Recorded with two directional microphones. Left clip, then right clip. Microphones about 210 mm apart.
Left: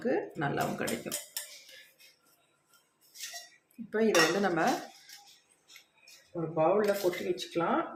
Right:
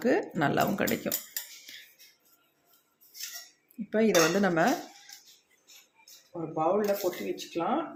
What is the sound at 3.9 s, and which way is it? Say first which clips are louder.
Cutlery: right 2 dB; 30° right (ahead or behind).